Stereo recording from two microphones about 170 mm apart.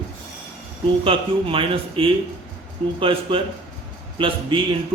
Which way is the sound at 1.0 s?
30° right (ahead or behind).